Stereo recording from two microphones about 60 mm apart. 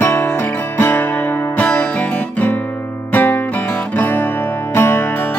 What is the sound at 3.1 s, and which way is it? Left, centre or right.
Music, left.